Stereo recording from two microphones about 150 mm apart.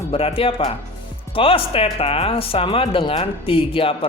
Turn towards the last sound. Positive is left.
turn(degrees=35)  # may be behind; listen again after turning